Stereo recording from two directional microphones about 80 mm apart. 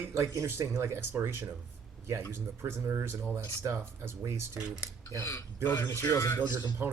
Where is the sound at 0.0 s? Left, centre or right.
Right.